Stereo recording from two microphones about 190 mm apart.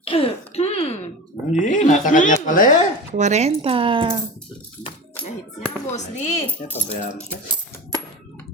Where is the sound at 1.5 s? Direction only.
40° left (ahead or behind).